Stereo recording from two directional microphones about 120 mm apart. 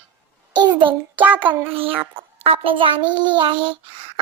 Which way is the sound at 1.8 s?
50° right (ahead or behind).